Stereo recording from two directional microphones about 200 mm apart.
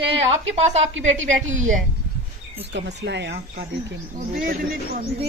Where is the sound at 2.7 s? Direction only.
60° right (ahead or behind).